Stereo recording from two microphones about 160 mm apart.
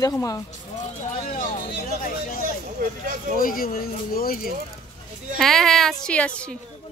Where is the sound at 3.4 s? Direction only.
65° left (ahead or behind).